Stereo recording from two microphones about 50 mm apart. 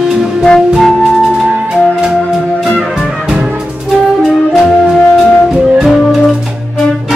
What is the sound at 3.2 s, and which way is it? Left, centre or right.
Music, centre.